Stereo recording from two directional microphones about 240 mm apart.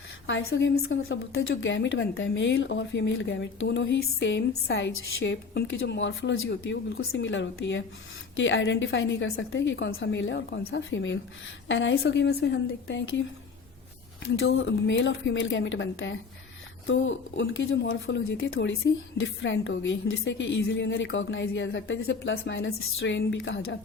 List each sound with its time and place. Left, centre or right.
0.3 s speech: left
14.3 s speech: left